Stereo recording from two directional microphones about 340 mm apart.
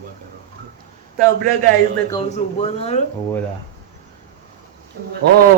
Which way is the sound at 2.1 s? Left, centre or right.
Centre.